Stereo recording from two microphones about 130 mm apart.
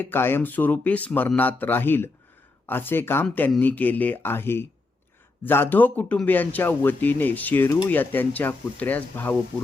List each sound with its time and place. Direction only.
0.0 s speech: 15° left (ahead or behind)